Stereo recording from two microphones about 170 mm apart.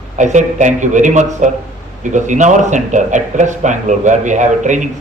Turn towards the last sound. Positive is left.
turn(degrees=-45)  # may be behind; listen again after turning